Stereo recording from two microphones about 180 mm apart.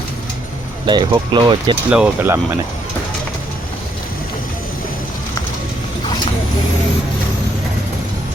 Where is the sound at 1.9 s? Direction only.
5° right (ahead or behind).